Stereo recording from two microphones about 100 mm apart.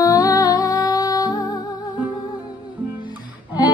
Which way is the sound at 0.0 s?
35° left (ahead or behind).